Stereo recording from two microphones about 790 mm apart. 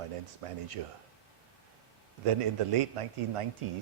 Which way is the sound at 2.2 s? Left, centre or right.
Right.